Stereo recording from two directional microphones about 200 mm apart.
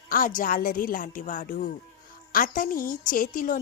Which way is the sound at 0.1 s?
45° left (ahead or behind).